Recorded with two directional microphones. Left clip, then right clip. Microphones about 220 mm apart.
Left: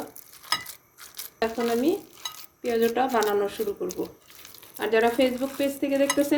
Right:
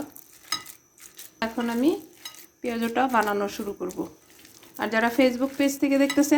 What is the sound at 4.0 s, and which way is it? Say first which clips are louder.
Speech: left 1 dB; 45° right (ahead or behind).